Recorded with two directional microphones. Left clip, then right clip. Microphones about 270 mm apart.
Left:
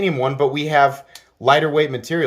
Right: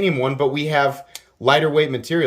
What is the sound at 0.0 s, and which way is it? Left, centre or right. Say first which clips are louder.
Speech: left 1 dB; centre.